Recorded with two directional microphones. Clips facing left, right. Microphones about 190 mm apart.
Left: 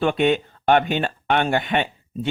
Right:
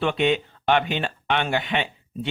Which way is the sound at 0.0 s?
45° left (ahead or behind).